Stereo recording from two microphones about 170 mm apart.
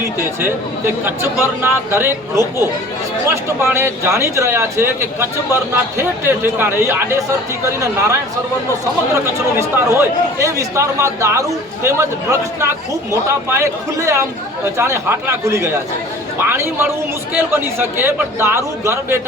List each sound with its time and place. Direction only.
1.0 s speech: 15° right (ahead or behind)
9.2 s speech: 15° right (ahead or behind)